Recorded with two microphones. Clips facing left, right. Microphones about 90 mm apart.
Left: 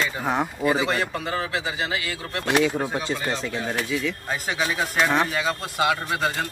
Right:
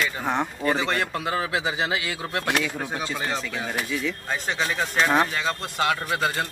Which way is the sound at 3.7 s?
Centre (ahead or behind).